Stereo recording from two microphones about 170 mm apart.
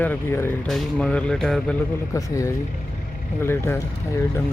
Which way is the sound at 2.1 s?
20° left (ahead or behind).